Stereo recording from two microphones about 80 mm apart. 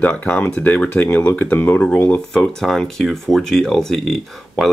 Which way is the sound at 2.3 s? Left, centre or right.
Centre.